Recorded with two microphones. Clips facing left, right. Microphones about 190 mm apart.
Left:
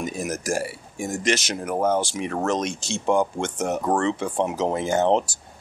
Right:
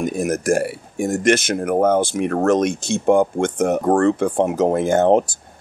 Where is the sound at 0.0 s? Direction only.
55° right (ahead or behind).